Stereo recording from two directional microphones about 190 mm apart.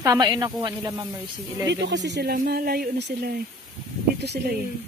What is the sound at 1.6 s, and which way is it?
Speech, 65° right (ahead or behind).